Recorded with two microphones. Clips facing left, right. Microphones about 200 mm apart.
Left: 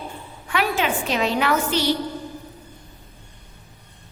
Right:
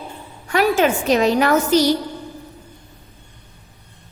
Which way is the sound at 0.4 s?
40° right (ahead or behind).